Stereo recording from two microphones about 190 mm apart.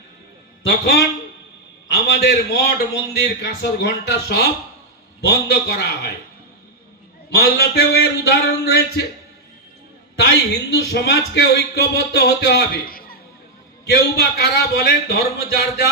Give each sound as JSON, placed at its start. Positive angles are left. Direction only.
{"t": 0.7, "sound": "a man's voice", "side_deg": 55}
{"t": 7.3, "sound": "a man's voice", "side_deg": 60}
{"t": 10.2, "sound": "a man's voice", "side_deg": 60}